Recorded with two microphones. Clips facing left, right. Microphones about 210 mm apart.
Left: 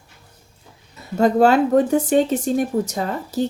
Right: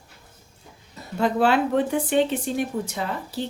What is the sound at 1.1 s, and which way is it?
Speech, 45° left (ahead or behind).